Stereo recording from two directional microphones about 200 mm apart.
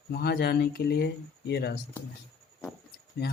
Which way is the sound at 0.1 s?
50° left (ahead or behind).